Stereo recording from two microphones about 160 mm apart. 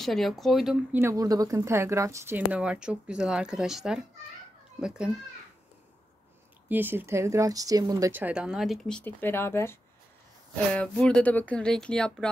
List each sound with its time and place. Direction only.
0.0 s speech: centre (ahead or behind)
0.9 s speech: 20° right (ahead or behind)
6.7 s speech: 10° right (ahead or behind)
8.1 s speech: 10° right (ahead or behind)